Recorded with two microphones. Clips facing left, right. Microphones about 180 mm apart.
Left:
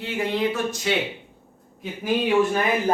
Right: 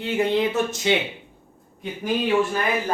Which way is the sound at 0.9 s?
25° right (ahead or behind).